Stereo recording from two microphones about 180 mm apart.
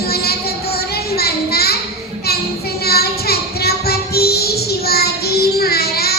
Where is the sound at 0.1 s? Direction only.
60° left (ahead or behind).